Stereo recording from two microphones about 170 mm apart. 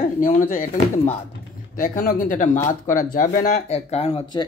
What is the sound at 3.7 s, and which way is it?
Speech, 40° left (ahead or behind).